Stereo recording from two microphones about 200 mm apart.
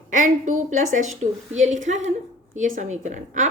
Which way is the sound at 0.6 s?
40° right (ahead or behind).